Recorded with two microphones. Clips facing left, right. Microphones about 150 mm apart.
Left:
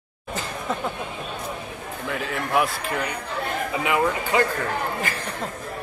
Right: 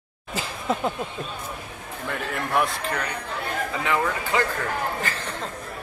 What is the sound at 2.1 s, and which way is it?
Speech, 5° left (ahead or behind).